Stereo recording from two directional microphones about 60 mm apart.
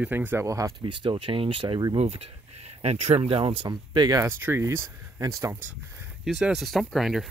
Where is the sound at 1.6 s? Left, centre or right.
Right.